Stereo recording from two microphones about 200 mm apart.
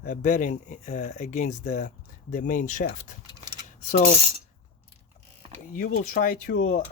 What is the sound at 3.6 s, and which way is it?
Rub, 35° left (ahead or behind).